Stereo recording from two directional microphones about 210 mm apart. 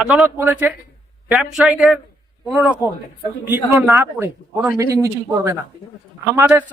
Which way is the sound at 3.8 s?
10° right (ahead or behind).